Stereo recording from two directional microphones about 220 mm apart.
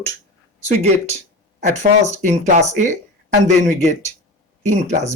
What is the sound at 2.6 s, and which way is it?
Speech, 35° right (ahead or behind).